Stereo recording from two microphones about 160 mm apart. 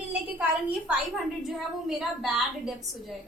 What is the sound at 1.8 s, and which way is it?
A woman's voice, centre (ahead or behind).